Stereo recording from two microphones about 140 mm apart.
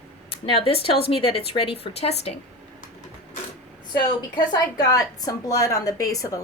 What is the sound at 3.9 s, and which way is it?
A woman's voice, 30° left (ahead or behind).